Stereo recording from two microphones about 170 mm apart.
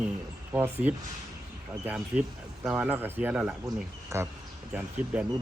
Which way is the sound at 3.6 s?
15° right (ahead or behind).